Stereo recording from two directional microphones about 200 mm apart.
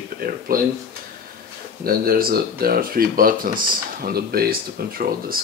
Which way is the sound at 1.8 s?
45° right (ahead or behind).